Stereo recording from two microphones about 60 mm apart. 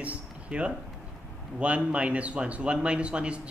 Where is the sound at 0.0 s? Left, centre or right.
Right.